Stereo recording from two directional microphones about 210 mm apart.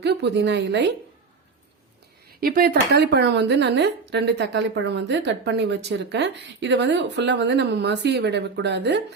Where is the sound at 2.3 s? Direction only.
45° right (ahead or behind).